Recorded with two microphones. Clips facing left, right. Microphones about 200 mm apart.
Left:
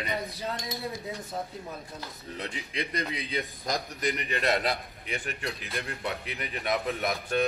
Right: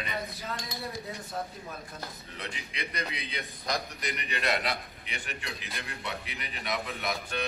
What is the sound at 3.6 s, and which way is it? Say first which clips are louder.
A man's voice: left 2 dB; 45° left (ahead or behind).